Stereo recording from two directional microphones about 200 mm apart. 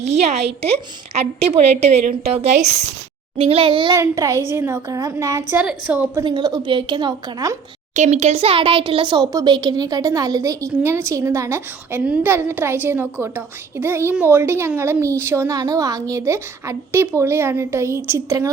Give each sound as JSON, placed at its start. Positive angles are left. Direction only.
{"t": 0.0, "sound": "a woman's voice", "side_deg": -35}
{"t": 6.2, "sound": "a woman's voice", "side_deg": -25}
{"t": 7.9, "sound": "speech", "side_deg": -35}